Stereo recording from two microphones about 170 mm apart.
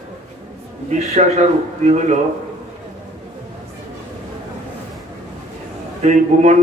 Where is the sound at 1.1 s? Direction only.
45° right (ahead or behind).